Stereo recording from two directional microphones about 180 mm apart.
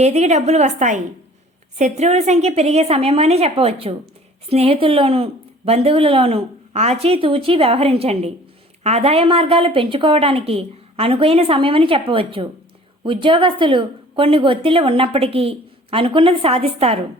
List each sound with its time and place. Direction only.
0.0 s a woman's voice: 40° right (ahead or behind)